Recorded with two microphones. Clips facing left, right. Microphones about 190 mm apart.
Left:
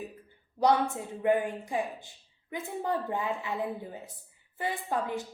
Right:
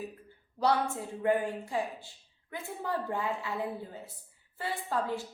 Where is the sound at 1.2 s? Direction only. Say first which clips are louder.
Left 2 dB; 15° left (ahead or behind).